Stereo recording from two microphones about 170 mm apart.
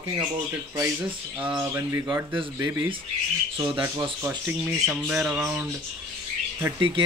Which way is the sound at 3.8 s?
15° right (ahead or behind).